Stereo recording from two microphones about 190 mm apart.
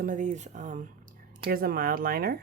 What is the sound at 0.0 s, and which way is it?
Speech, 40° right (ahead or behind).